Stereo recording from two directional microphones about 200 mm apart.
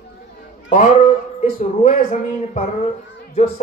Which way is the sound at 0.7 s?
35° left (ahead or behind).